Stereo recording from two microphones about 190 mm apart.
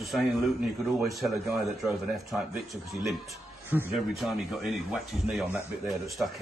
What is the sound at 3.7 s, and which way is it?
A man's voice, 5° right (ahead or behind).